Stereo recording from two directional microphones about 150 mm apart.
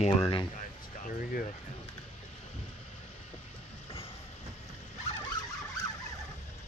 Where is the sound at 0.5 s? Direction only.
60° left (ahead or behind).